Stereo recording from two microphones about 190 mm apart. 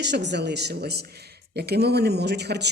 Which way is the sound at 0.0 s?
65° right (ahead or behind).